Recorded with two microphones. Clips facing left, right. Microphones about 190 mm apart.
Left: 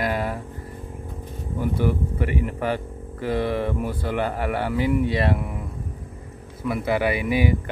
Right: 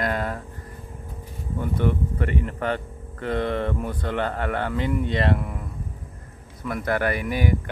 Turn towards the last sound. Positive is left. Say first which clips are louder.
# left 3 dB
turn(degrees=10)  # may be behind; listen again after turning